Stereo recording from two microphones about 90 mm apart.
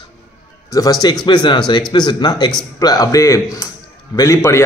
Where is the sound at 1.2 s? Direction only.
60° left (ahead or behind).